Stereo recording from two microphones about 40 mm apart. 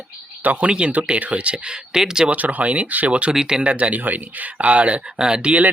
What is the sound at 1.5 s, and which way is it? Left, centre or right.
Speech, right.